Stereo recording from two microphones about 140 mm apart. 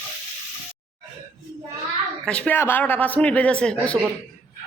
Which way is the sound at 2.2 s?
10° left (ahead or behind).